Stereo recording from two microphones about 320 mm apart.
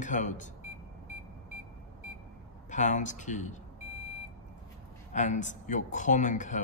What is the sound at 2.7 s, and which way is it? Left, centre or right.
Speech, left.